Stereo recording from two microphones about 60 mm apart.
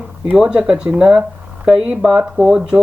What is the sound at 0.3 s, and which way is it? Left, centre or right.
Speech, centre.